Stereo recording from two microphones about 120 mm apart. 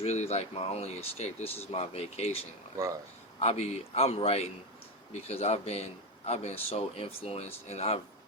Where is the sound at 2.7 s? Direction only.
25° right (ahead or behind).